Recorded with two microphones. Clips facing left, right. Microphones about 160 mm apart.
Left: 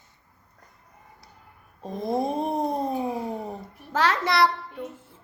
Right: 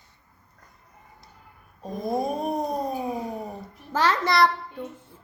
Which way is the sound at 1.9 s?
25° left (ahead or behind).